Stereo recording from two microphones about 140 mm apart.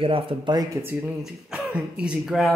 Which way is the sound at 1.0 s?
10° right (ahead or behind).